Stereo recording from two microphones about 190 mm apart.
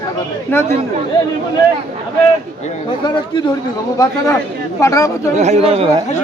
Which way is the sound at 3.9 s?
15° left (ahead or behind).